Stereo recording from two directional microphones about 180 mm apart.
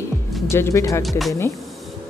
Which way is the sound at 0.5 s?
15° left (ahead or behind).